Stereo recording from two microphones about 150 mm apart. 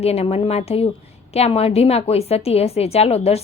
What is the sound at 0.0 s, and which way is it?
A woman's voice, 45° left (ahead or behind).